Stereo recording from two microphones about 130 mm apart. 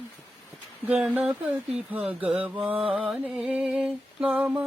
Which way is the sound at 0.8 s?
5° right (ahead or behind).